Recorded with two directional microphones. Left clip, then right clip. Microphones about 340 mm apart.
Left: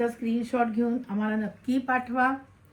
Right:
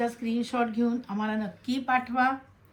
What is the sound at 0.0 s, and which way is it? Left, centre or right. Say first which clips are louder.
Speech: left 1 dB; centre.